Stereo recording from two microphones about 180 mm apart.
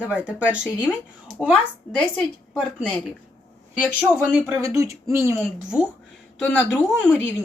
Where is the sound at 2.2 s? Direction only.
5° left (ahead or behind).